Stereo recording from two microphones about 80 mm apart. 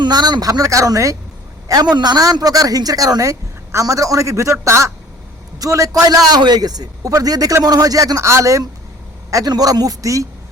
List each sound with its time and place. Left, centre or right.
0.0 s speech: right
9.3 s speech: right